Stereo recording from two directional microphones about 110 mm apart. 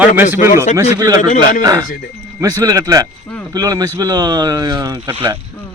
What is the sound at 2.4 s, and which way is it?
Speech, 35° right (ahead or behind).